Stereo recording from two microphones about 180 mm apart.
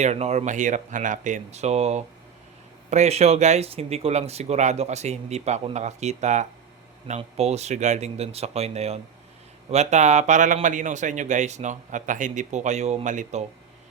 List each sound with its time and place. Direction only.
0.0 s a man's voice: 40° right (ahead or behind)